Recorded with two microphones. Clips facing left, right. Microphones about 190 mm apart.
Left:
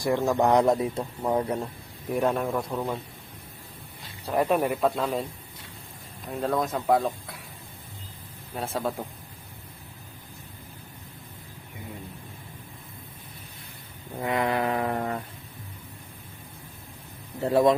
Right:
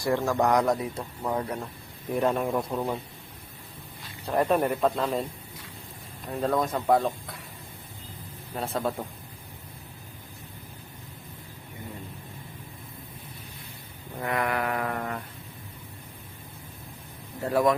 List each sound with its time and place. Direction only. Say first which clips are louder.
0.0 s speech: left 2 dB; 15° left (ahead or behind)
2.1 s a man's voice: even; centre (ahead or behind)
4.3 s speech: even; 5° left (ahead or behind)
6.2 s speech: right 1 dB; centre (ahead or behind)
8.5 s speech: even; centre (ahead or behind)
14.2 s a sound: left 2 dB; 20° left (ahead or behind)
17.4 s speech: left 3 dB; 25° left (ahead or behind)